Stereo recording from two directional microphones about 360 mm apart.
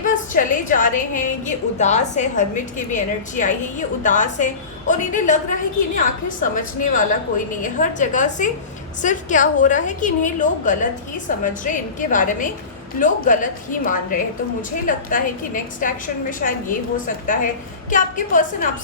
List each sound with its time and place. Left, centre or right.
0.0 s a woman's voice: left